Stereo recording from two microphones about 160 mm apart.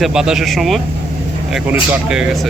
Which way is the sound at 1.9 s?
5° right (ahead or behind).